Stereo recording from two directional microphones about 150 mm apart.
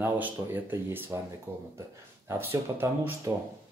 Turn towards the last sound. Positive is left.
turn(degrees=-15)  # may be behind; listen again after turning